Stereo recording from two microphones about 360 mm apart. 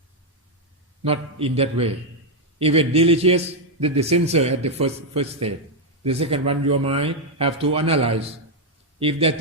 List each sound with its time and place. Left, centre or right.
1.0 s a man's voice: centre